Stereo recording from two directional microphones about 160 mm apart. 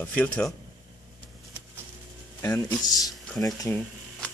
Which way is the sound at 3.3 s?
20° left (ahead or behind).